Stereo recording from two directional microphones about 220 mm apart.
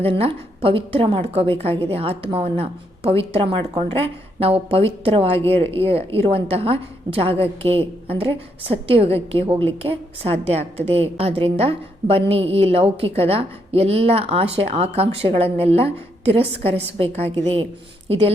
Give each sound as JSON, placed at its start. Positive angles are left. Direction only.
{"t": 0.0, "sound": "a woman's voice", "side_deg": -25}